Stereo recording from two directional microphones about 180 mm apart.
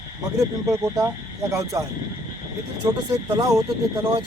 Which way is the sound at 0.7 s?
15° right (ahead or behind).